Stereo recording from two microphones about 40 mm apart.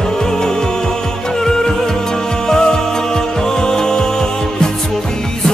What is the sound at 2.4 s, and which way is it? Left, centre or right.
Music, centre.